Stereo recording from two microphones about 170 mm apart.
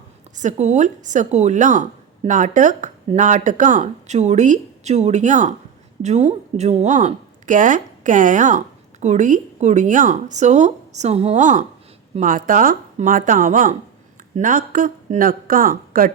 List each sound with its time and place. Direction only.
0.3 s a woman's voice: 45° right (ahead or behind)